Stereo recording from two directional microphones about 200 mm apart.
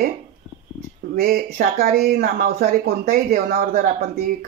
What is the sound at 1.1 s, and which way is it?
Speech, 50° right (ahead or behind).